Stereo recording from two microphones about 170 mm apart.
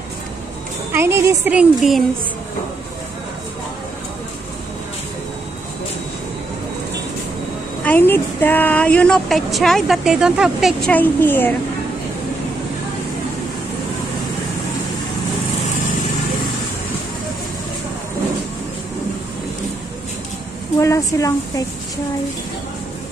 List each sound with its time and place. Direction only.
0.9 s a woman's voice: 15° right (ahead or behind)
7.8 s speech: 10° left (ahead or behind)
10.9 s a child's voice: 10° left (ahead or behind)
20.8 s speech: 20° left (ahead or behind)